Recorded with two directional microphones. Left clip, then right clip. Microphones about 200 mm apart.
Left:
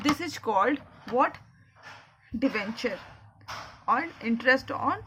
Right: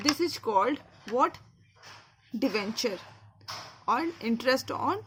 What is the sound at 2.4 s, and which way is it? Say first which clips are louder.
A woman's voice: even; 45° right (ahead or behind).